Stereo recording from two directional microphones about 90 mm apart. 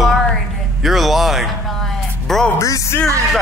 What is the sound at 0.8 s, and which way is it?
Music, centre (ahead or behind).